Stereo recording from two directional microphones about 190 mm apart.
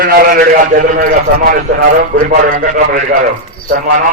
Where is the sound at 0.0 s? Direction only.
50° right (ahead or behind).